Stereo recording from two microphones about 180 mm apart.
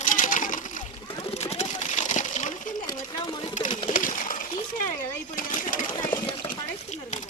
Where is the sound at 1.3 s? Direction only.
35° left (ahead or behind).